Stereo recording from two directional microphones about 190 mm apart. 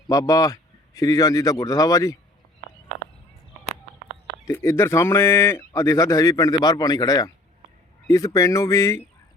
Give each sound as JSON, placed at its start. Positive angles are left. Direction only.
{"t": 0.1, "sound": "speech", "side_deg": 20}
{"t": 4.4, "sound": "speech", "side_deg": 15}